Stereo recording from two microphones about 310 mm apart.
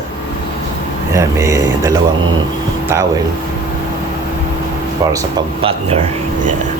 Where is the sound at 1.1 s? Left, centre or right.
Centre.